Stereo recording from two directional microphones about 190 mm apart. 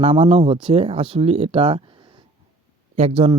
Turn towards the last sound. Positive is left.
turn(degrees=-30)  # may be behind; listen again after turning